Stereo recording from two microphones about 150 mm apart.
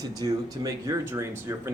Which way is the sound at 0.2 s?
25° right (ahead or behind).